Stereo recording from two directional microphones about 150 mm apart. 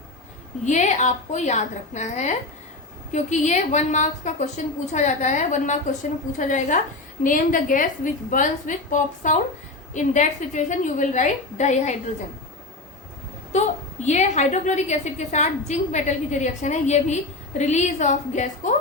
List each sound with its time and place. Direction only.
0.6 s a woman's voice: 55° left (ahead or behind)
14.0 s a woman's voice: 50° left (ahead or behind)